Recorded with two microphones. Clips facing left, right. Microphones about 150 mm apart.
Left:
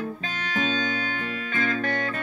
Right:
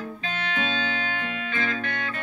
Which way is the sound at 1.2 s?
40° left (ahead or behind).